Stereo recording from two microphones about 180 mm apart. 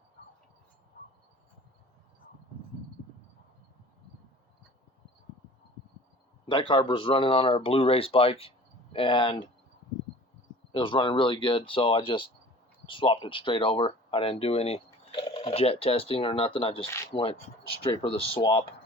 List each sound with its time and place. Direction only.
6.5 s speech: 30° left (ahead or behind)
10.7 s speech: 30° left (ahead or behind)